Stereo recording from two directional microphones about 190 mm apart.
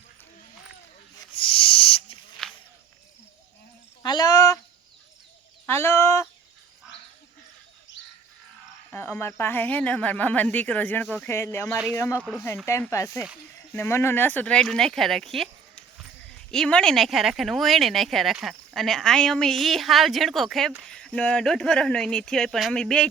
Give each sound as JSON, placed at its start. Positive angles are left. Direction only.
{"t": 1.3, "sound": "owl", "side_deg": 30}
{"t": 2.4, "sound": "walk", "side_deg": 0}
{"t": 4.0, "sound": "a sound", "side_deg": 20}
{"t": 5.6, "sound": "speech", "side_deg": 15}
{"t": 8.9, "sound": "speech", "side_deg": 10}